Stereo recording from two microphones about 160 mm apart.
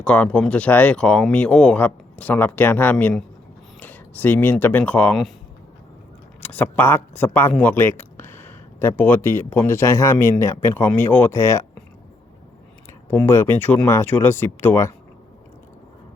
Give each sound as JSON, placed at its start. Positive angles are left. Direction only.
{"t": 0.0, "sound": "speech", "side_deg": 5}
{"t": 6.4, "sound": "speech", "side_deg": 10}
{"t": 13.1, "sound": "speech", "side_deg": 15}